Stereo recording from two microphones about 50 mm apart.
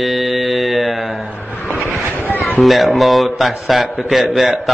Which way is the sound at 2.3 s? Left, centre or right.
Left.